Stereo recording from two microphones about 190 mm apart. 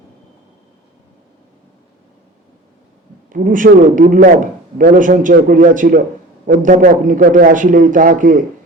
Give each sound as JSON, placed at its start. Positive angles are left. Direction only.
{"t": 3.2, "sound": "a man's voice", "side_deg": -45}